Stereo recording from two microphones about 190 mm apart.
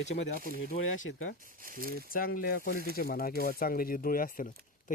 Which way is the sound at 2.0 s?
50° left (ahead or behind).